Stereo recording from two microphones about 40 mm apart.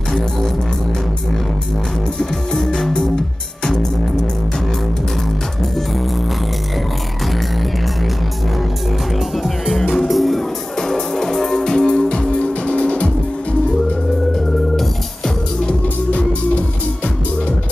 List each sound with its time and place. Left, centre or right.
2.5 s music: centre
9.4 s music: centre; by 13.1 s left
16.1 s music: left